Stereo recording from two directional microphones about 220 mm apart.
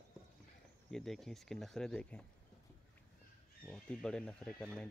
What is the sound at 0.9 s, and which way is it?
Speech, centre (ahead or behind).